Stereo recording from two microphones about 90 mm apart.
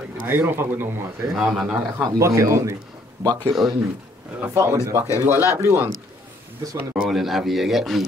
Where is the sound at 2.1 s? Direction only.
35° right (ahead or behind).